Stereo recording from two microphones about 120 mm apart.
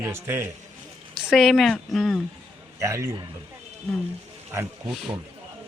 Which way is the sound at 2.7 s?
25° right (ahead or behind).